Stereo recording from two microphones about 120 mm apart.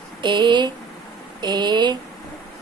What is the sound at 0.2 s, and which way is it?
Speech, 40° right (ahead or behind).